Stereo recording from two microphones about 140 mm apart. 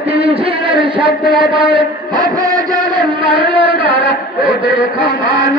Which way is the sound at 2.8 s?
35° right (ahead or behind).